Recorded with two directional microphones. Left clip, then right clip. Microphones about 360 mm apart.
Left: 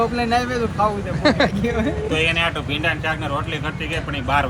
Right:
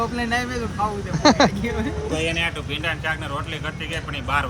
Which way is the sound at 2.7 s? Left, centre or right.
Centre.